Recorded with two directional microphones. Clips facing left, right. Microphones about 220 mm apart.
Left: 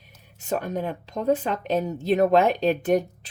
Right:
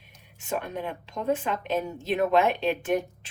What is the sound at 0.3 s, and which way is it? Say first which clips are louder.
A woman's voice: left 4 dB; 40° left (ahead or behind).